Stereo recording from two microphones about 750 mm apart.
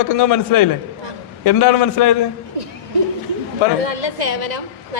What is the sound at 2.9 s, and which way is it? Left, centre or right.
Speech, right.